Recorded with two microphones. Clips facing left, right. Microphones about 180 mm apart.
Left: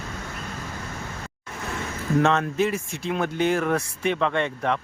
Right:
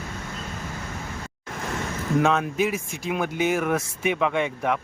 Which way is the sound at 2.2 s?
5° right (ahead or behind).